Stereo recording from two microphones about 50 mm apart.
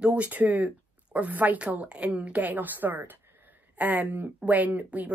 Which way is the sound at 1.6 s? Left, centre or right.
Right.